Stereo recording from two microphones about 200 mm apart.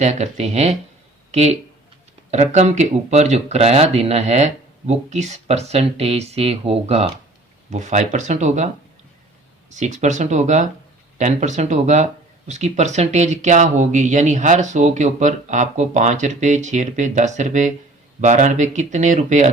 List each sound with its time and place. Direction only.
0.0 s speech: 35° right (ahead or behind)
9.7 s speech: 35° right (ahead or behind)